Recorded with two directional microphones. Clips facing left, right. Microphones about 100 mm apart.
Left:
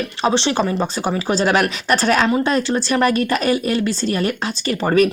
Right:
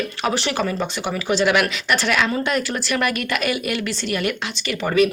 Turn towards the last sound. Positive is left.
turn(degrees=40)  # may be behind; listen again after turning